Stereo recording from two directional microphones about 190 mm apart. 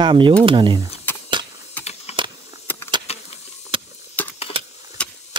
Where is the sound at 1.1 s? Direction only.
10° left (ahead or behind).